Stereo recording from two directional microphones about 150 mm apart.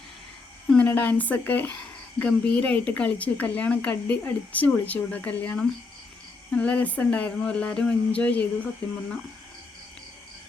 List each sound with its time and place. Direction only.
0.7 s a woman's voice: 10° left (ahead or behind)